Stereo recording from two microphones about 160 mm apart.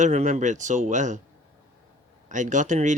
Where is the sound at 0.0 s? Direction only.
50° right (ahead or behind).